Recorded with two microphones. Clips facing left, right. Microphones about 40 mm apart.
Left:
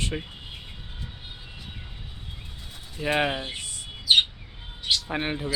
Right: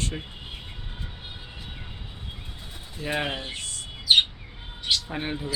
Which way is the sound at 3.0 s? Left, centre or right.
Left.